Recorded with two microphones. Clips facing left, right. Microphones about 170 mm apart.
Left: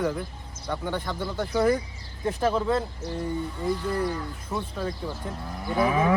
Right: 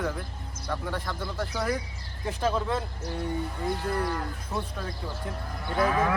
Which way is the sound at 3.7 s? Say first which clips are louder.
Left 3 dB; 60° right (ahead or behind).